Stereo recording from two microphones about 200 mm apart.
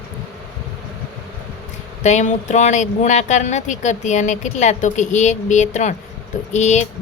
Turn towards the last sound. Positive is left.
turn(degrees=35)  # may be behind; listen again after turning